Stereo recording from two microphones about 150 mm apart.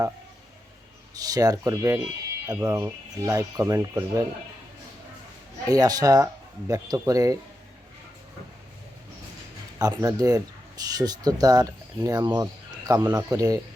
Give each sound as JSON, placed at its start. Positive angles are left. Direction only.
{"t": 1.2, "sound": "speech", "side_deg": -25}
{"t": 5.6, "sound": "speech", "side_deg": -25}
{"t": 9.7, "sound": "speech", "side_deg": -25}